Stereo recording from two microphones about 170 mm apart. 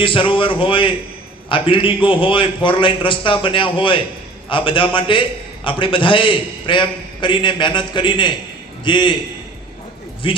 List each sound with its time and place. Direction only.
0.0 s a man's voice: 30° left (ahead or behind)
10.2 s speech: 30° left (ahead or behind)